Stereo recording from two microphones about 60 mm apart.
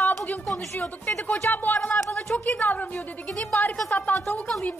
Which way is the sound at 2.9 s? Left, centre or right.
Centre.